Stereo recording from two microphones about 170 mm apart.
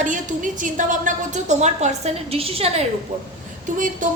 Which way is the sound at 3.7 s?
50° right (ahead or behind).